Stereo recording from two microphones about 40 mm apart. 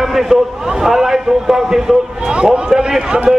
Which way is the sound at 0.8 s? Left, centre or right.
Centre.